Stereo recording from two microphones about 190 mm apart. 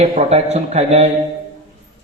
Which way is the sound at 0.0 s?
35° right (ahead or behind).